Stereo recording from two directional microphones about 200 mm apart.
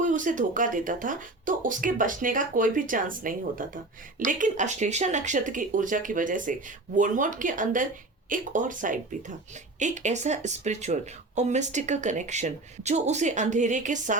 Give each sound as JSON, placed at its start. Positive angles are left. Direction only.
{"t": 0.0, "sound": "speech", "side_deg": -40}